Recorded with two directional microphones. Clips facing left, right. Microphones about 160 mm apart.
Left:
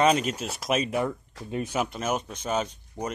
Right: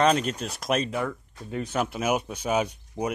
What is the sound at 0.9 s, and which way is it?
Speech, 15° left (ahead or behind).